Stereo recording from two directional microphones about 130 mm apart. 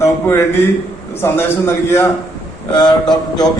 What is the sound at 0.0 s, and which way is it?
A man's voice, 20° left (ahead or behind).